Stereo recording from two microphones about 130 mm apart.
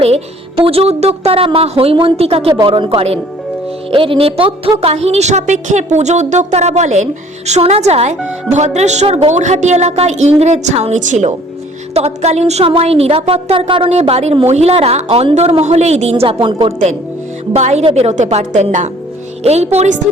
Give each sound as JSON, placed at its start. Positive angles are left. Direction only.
{"t": 0.0, "sound": "a woman's voice", "side_deg": -50}
{"t": 11.9, "sound": "a woman's voice", "side_deg": -55}
{"t": 14.0, "sound": "a woman's voice", "side_deg": -55}
{"t": 17.5, "sound": "a woman's voice", "side_deg": -60}
{"t": 19.4, "sound": "a woman's voice", "side_deg": -55}